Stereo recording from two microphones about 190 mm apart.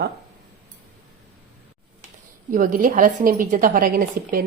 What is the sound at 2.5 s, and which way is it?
Speech, 45° right (ahead or behind).